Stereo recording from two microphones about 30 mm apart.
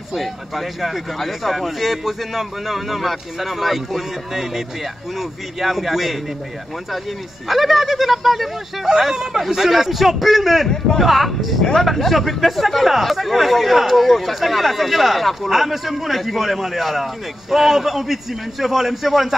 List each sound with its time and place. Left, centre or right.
0.1 s a man's voice: centre
7.4 s speech: centre
8.8 s a man's voice: centre
9.7 s a man's voice: centre